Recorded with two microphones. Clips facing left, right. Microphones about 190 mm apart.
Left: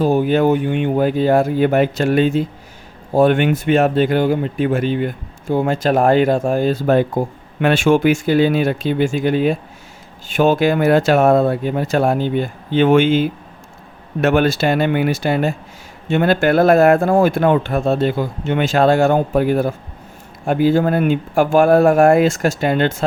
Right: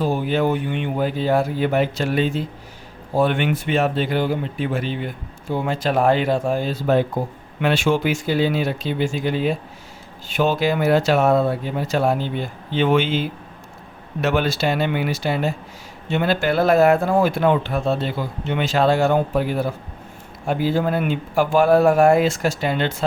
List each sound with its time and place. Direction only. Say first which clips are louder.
0.0 s speech: left 6 dB; 50° left (ahead or behind)